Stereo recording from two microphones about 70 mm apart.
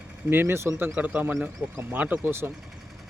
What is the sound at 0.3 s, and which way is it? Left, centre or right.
Speech, right.